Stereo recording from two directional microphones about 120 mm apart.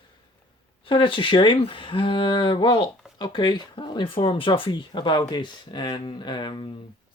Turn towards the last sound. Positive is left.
turn(degrees=40)  # may be behind; listen again after turning